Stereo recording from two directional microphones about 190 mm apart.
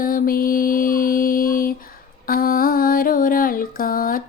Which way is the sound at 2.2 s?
50° left (ahead or behind).